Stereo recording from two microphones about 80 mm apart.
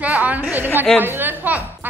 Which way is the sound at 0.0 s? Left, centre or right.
Centre.